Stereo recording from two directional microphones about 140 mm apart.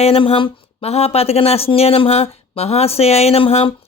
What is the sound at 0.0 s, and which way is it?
Speech, 45° left (ahead or behind).